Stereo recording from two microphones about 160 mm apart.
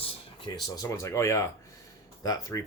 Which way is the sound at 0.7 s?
20° left (ahead or behind).